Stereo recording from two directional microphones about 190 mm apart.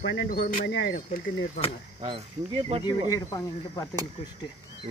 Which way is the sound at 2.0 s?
30° right (ahead or behind).